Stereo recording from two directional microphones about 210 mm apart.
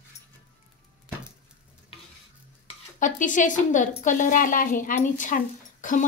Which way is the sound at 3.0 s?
35° left (ahead or behind).